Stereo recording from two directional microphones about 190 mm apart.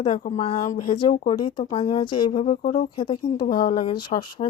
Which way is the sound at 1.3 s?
25° left (ahead or behind).